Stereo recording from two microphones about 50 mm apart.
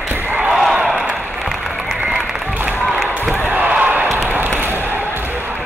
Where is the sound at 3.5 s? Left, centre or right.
Right.